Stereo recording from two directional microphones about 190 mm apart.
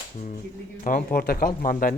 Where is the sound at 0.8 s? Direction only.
40° left (ahead or behind).